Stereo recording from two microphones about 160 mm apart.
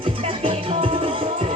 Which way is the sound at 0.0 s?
35° right (ahead or behind).